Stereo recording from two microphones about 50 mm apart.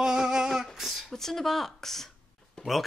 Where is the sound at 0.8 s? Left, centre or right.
Centre.